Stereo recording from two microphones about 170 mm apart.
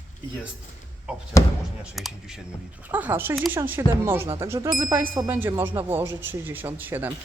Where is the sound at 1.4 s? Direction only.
20° left (ahead or behind).